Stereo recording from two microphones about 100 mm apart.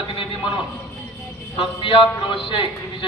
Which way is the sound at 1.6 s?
60° left (ahead or behind).